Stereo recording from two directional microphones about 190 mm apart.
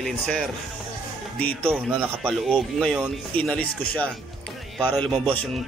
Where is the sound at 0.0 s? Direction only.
Centre (ahead or behind).